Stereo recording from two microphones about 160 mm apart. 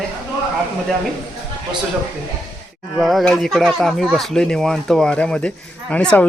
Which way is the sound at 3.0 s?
Centre (ahead or behind).